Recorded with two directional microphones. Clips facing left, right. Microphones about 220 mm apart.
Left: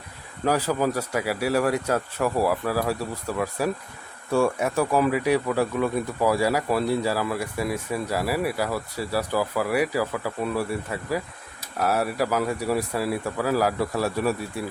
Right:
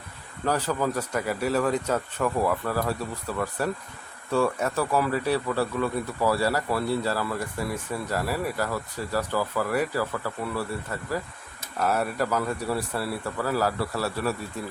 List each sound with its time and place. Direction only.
0.4 s speech: 10° left (ahead or behind)